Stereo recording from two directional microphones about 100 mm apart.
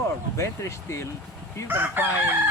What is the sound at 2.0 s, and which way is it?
Chicken, 20° right (ahead or behind).